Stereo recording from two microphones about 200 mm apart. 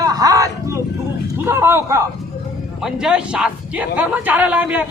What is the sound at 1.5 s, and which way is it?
A man's voice, 10° right (ahead or behind).